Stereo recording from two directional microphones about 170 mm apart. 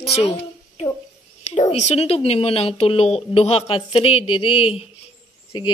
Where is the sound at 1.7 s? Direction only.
40° left (ahead or behind).